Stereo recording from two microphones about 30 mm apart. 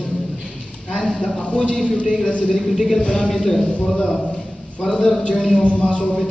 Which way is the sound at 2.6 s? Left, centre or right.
Centre.